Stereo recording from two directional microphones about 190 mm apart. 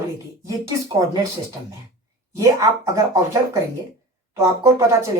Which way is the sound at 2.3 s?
15° right (ahead or behind).